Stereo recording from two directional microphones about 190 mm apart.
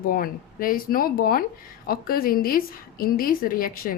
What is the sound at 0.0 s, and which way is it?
Speech, 50° left (ahead or behind).